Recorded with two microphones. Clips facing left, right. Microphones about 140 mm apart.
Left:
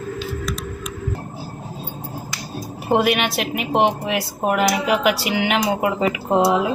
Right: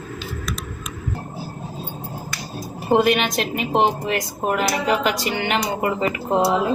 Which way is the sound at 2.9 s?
5° left (ahead or behind).